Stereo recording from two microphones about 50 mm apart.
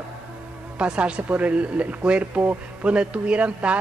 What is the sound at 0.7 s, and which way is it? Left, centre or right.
A woman's voice, right.